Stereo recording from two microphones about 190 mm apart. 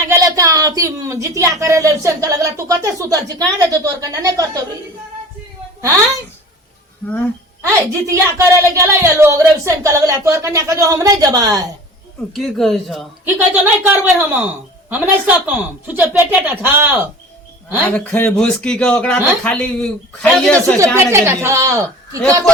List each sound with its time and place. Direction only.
0.1 s speech: 15° right (ahead or behind)
7.0 s speech: 5° left (ahead or behind)
7.6 s speech: 15° right (ahead or behind)
12.3 s speech: centre (ahead or behind)
13.5 s speech: 10° right (ahead or behind)
17.8 s speech: 10° left (ahead or behind)
20.7 s speech: 15° right (ahead or behind)